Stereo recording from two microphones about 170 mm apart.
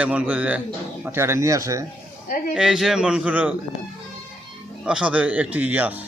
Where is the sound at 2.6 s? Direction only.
5° right (ahead or behind).